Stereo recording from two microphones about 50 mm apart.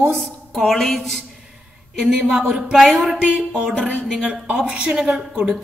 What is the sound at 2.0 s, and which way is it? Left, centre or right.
Speech, centre.